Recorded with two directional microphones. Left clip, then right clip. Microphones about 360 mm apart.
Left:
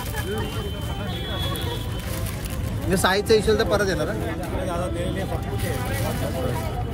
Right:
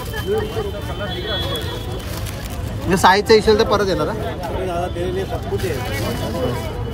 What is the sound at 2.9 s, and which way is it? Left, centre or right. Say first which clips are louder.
Speech: right 7 dB; right.